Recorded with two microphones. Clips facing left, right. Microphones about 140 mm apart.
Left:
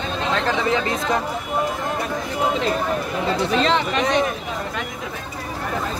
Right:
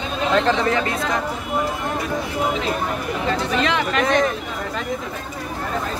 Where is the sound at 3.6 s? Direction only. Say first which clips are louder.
Left 1 dB; 30° left (ahead or behind).